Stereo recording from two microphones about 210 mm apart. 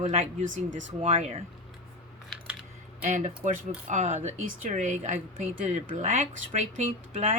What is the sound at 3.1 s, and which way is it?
Speech, 35° right (ahead or behind).